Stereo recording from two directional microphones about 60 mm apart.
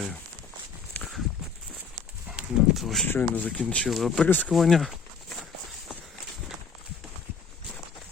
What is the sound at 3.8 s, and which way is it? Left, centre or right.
Speech, centre.